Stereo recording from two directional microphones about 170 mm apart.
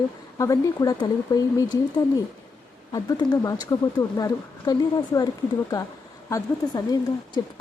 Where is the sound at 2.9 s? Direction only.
20° left (ahead or behind).